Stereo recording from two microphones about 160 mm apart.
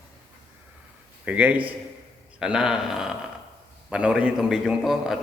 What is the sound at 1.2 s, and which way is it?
A man's voice, 10° right (ahead or behind).